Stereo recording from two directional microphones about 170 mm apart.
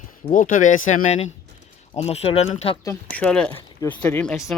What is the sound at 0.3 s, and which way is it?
Speech, 50° left (ahead or behind).